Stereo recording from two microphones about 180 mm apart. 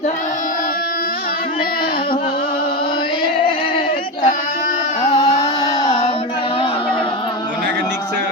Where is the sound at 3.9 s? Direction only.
50° left (ahead or behind).